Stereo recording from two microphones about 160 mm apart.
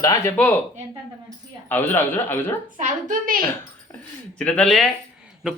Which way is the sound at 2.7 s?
55° right (ahead or behind).